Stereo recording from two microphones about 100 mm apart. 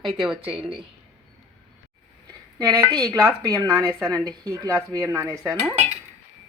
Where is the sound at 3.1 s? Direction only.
35° right (ahead or behind).